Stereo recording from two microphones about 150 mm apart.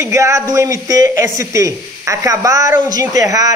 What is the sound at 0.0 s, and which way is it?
Speech, 20° right (ahead or behind).